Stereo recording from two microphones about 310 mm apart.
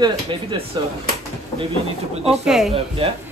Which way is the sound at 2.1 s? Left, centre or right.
Centre.